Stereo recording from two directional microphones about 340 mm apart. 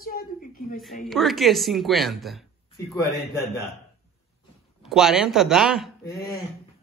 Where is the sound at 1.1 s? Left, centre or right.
Centre.